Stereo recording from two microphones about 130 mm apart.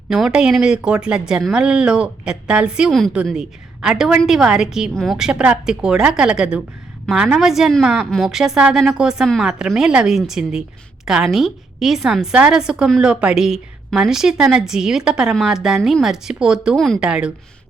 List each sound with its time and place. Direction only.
0.1 s a woman's voice: 5° right (ahead or behind)